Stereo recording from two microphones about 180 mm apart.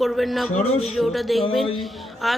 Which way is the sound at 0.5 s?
35° left (ahead or behind).